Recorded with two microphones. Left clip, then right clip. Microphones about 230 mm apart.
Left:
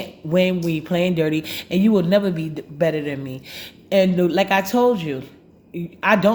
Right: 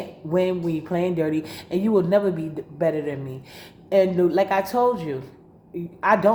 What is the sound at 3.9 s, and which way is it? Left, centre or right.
Speech, left.